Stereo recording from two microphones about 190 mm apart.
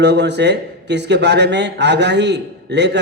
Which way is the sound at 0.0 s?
65° right (ahead or behind).